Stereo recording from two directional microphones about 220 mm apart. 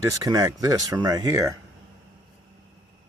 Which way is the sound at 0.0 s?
15° right (ahead or behind).